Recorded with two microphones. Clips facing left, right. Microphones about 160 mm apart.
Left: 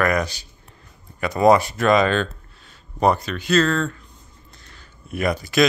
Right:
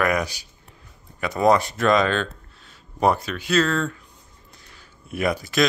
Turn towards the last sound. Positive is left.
turn(degrees=0)  # may be behind; listen again after turning